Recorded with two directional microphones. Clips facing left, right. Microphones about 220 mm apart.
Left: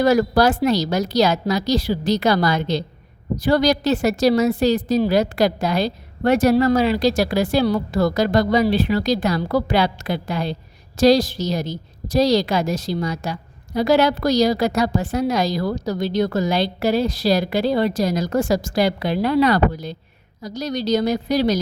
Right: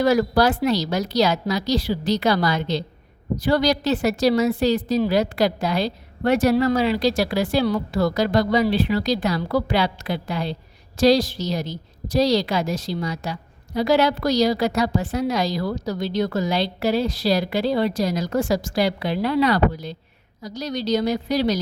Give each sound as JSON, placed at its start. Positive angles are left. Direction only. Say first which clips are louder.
{"t": 0.0, "sound": "a woman's voice", "louder": "left 2 dB", "side_deg": 45}